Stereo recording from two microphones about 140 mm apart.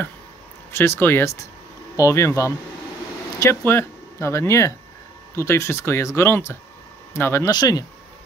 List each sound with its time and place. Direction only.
0.7 s speech: 20° left (ahead or behind)
7.5 s speech: 30° left (ahead or behind)